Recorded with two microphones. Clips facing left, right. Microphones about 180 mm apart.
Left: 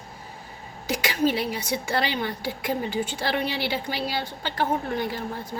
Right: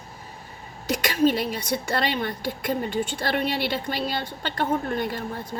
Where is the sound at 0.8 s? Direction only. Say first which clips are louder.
Right 3 dB; 5° left (ahead or behind).